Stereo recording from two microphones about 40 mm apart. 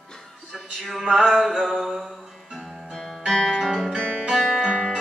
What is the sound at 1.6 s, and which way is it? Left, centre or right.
Mantra, centre.